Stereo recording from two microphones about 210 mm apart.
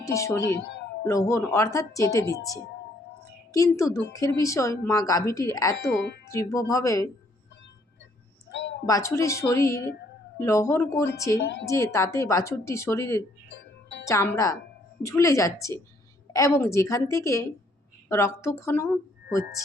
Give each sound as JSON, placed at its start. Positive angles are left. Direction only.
{"t": 0.0, "sound": "speech", "side_deg": 15}
{"t": 0.4, "sound": "speech", "side_deg": 55}
{"t": 1.0, "sound": "speech", "side_deg": 15}
{"t": 8.5, "sound": "a sound", "side_deg": 60}
{"t": 8.9, "sound": "speech", "side_deg": 15}
{"t": 11.3, "sound": "speech", "side_deg": 55}
{"t": 11.6, "sound": "speech", "side_deg": 15}